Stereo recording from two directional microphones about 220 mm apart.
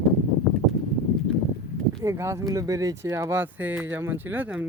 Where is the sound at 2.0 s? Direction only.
15° right (ahead or behind).